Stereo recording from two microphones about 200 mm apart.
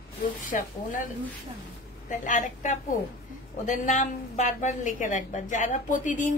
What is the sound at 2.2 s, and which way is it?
A woman's voice, 40° left (ahead or behind).